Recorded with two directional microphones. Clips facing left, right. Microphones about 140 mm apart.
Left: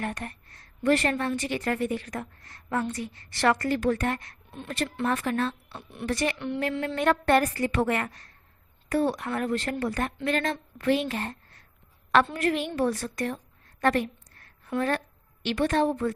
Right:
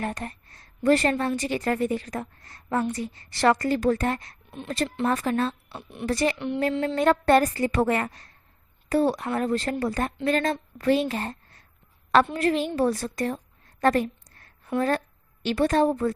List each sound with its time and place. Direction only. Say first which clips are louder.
0.0 s a woman's voice: right 2 dB; 30° right (ahead or behind)